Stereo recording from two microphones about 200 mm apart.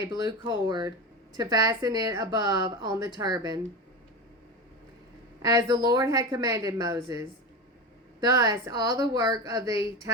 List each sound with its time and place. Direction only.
0.0 s a woman's voice: 20° right (ahead or behind)
5.4 s a woman's voice: 20° right (ahead or behind)